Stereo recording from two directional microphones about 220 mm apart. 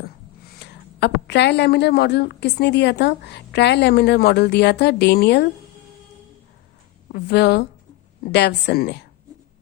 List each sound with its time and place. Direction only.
0.4 s a woman's voice: 45° left (ahead or behind)
7.1 s a woman's voice: 50° left (ahead or behind)